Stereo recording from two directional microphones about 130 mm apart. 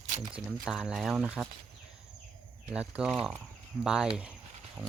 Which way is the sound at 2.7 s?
10° right (ahead or behind).